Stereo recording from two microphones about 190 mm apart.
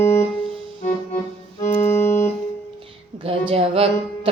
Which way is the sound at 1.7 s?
10° left (ahead or behind).